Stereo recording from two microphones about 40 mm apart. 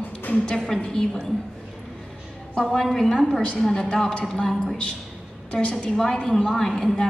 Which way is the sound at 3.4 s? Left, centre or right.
Left.